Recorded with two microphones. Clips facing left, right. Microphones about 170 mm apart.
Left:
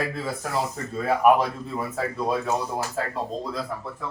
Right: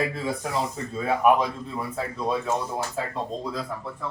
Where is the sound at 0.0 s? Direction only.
Centre (ahead or behind).